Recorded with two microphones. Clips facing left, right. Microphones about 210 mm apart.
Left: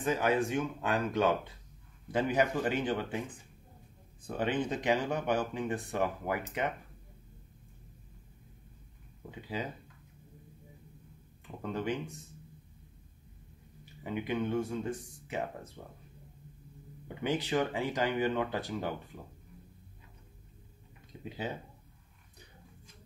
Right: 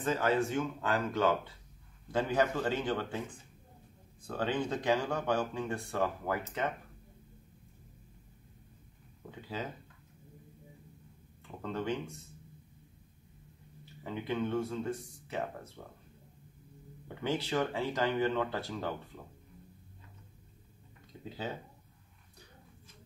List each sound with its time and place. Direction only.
0.0 s speech: 15° left (ahead or behind)
4.3 s speech: 20° left (ahead or behind)
9.3 s speech: 15° left (ahead or behind)
11.6 s speech: 15° left (ahead or behind)
14.0 s speech: 15° left (ahead or behind)
17.2 s speech: 15° left (ahead or behind)